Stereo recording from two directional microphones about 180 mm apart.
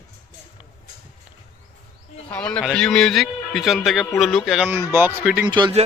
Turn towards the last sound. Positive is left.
turn(degrees=-25)  # may be behind; listen again after turning